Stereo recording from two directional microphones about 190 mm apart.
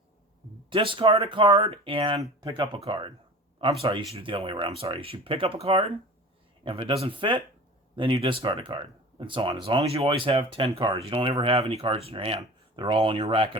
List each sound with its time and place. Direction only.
0.7 s speech: 25° right (ahead or behind)